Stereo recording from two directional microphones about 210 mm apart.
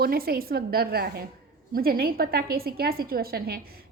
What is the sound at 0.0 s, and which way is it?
A woman's voice, 45° right (ahead or behind).